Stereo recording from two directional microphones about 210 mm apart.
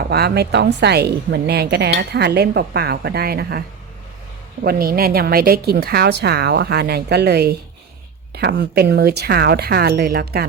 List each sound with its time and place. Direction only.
0.0 s a woman's voice: 50° right (ahead or behind)
4.6 s a woman's voice: 45° right (ahead or behind)